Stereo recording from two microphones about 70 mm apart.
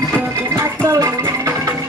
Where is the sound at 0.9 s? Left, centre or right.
Right.